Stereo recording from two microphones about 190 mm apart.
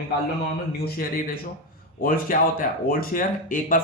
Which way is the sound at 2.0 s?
50° left (ahead or behind).